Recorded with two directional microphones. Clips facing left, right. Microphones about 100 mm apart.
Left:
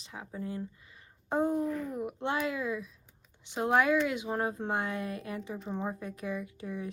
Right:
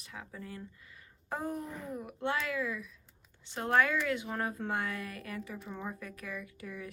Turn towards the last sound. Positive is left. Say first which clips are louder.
# left 5 dB
turn(degrees=25)  # may be behind; listen again after turning